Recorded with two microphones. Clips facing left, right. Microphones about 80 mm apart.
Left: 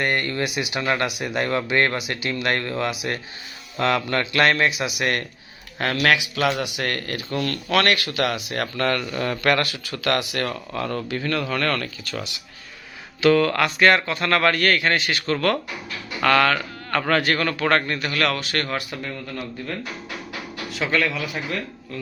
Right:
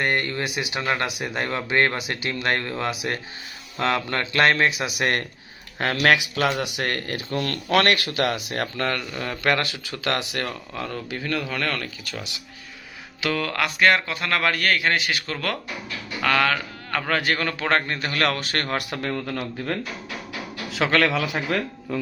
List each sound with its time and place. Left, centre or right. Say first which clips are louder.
0.0 s a man's voice: left 1 dB; right
0.5 s speech: left 2 dB; right
0.8 s a man's voice: left 2 dB; centre; by 8.7 s right
8.8 s speech: left 4 dB; centre
9.4 s a man's voice: even; right
10.7 s speech: left 4 dB; centre
13.2 s a man's voice: left 7 dB; centre; by 18.8 s right
18.8 s speech: right 4 dB; right
20.7 s speech: right 3 dB; right